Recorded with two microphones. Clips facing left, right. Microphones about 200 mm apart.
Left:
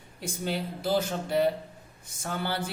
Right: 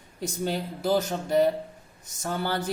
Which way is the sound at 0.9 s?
45° right (ahead or behind).